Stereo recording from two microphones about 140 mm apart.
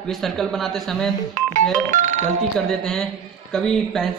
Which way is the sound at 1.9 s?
65° right (ahead or behind).